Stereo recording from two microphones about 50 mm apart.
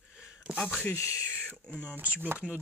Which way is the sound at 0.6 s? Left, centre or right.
Left.